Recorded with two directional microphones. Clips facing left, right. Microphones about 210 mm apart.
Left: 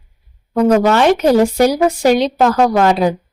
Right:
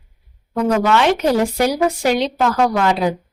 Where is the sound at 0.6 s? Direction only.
40° left (ahead or behind).